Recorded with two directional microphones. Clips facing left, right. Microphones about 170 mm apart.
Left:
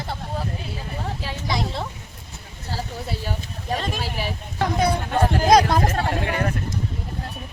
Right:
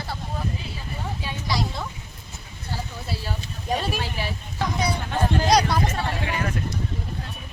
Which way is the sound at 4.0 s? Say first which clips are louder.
Left 2 dB; 10° left (ahead or behind).